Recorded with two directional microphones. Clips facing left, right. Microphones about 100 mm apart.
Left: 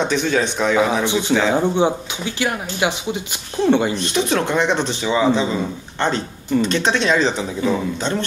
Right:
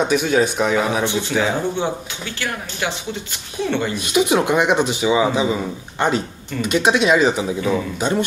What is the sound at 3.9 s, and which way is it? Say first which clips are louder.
Speech: right 2 dB; 10° right (ahead or behind).